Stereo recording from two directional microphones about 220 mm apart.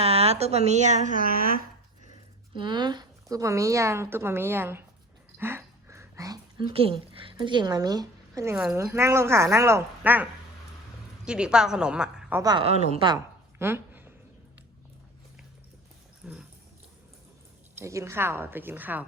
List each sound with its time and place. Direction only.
0.0 s a woman's voice: 25° right (ahead or behind)
2.6 s speech: 20° right (ahead or behind)
5.4 s a sound: 10° right (ahead or behind)
6.7 s speech: 25° right (ahead or behind); by 10.2 s 10° right (ahead or behind)
11.3 s a woman's voice: 5° right (ahead or behind)
12.4 s a woman's voice: 20° right (ahead or behind)
13.1 s a sound: 10° right (ahead or behind)
16.2 s roaring cats: 5° right (ahead or behind)
17.7 s speech: 10° right (ahead or behind)